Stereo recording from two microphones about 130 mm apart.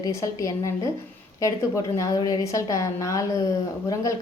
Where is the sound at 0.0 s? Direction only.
25° left (ahead or behind).